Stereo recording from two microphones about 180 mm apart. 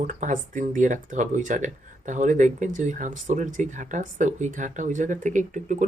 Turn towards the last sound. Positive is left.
turn(degrees=-45)  # may be behind; listen again after turning